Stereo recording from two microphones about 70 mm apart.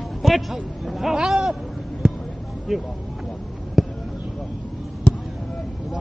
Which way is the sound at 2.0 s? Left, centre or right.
Centre.